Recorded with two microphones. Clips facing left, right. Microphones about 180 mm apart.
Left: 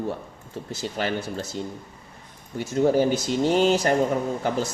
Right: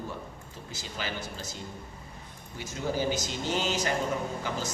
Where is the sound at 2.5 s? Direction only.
60° left (ahead or behind).